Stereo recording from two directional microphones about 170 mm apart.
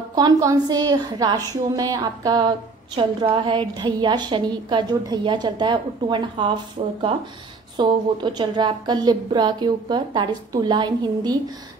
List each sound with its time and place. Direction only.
0.1 s a woman's voice: 20° right (ahead or behind)